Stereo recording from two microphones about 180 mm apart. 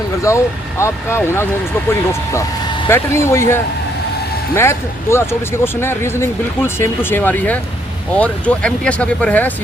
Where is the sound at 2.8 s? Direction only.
15° left (ahead or behind).